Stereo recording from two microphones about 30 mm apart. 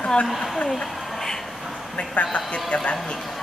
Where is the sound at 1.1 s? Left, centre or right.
Centre.